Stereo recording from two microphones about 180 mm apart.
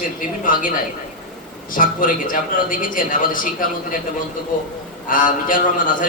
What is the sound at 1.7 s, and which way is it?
A man's voice, 50° left (ahead or behind).